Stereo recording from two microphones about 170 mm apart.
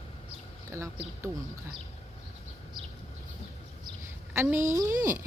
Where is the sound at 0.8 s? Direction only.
15° right (ahead or behind).